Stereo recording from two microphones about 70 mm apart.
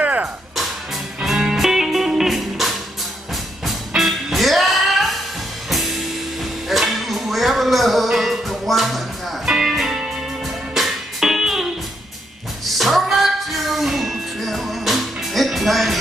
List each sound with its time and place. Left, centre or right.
0.0 s music: right
1.2 s music: centre